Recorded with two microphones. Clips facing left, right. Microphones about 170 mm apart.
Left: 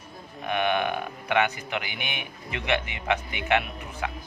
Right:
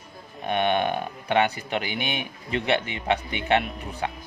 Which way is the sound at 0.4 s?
35° right (ahead or behind).